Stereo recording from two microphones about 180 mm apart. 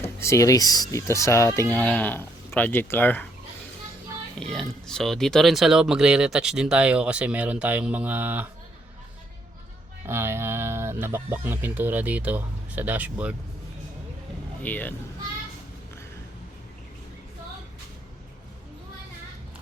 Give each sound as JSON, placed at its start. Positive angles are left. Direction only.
{"t": 0.0, "sound": "speech", "side_deg": 15}
{"t": 4.4, "sound": "speech", "side_deg": 5}
{"t": 10.1, "sound": "speech", "side_deg": -15}
{"t": 14.6, "sound": "speech", "side_deg": 10}